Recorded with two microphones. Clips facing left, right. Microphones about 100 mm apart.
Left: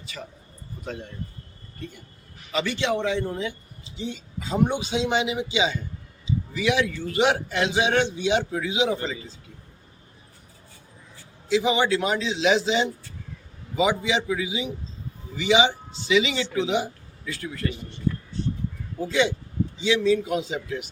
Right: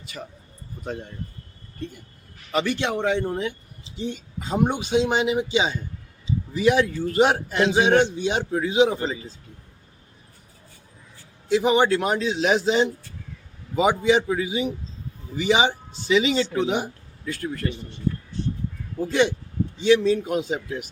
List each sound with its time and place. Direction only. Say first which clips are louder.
2.5 s a man's voice: right 1 dB; 50° right (ahead or behind)
11.4 s a man's voice: right 3 dB; 50° right (ahead or behind)
19.8 s a man's voice: right 3 dB; 50° right (ahead or behind)